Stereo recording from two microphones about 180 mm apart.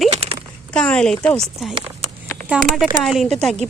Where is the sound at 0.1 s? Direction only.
30° right (ahead or behind).